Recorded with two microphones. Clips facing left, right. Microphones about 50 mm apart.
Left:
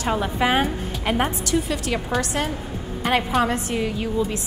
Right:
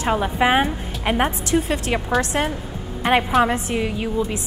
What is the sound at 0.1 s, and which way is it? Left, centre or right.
A woman's voice, centre.